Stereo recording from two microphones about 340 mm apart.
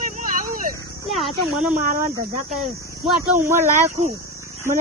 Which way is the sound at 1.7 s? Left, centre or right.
Right.